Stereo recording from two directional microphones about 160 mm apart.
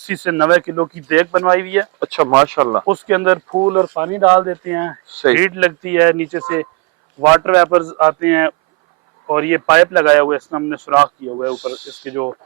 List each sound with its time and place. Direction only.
0.1 s speech: 10° right (ahead or behind)